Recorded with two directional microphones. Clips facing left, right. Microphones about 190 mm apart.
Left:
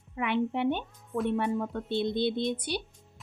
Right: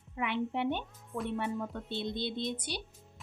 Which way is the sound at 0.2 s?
60° left (ahead or behind).